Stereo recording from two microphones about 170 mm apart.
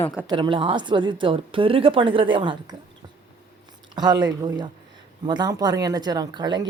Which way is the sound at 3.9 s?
25° right (ahead or behind).